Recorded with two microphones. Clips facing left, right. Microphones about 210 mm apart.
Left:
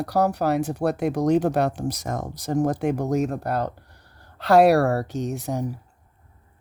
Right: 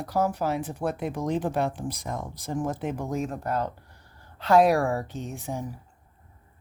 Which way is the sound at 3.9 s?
70° left (ahead or behind).